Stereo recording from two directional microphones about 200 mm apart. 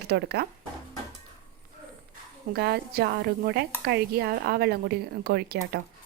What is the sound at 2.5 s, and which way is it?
A woman's voice, 50° right (ahead or behind).